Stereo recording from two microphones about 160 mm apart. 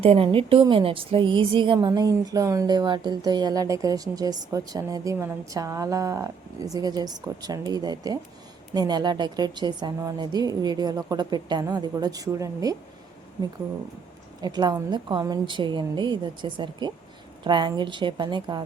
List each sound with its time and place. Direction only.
0.0 s a woman's voice: 35° right (ahead or behind); by 12.7 s 20° right (ahead or behind)
14.4 s a woman's voice: 25° right (ahead or behind)